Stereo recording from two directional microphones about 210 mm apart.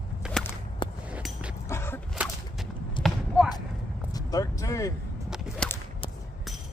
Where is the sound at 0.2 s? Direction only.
5° right (ahead or behind).